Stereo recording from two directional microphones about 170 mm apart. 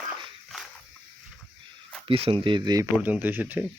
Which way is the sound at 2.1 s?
35° right (ahead or behind).